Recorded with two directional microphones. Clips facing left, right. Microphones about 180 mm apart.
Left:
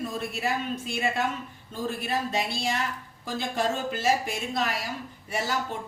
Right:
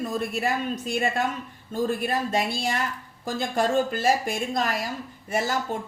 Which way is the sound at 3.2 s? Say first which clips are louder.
Right 3 dB; 50° right (ahead or behind).